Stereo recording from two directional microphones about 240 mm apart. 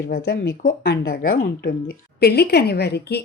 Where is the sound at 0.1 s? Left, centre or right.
Left.